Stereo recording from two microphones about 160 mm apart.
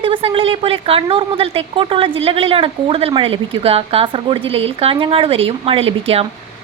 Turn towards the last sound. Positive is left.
turn(degrees=-35)  # may be behind; listen again after turning